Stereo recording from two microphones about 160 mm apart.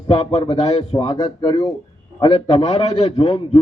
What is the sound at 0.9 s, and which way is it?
Speech, 25° left (ahead or behind).